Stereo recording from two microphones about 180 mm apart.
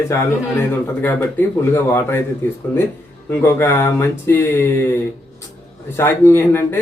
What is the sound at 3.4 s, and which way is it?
Speech, 15° left (ahead or behind).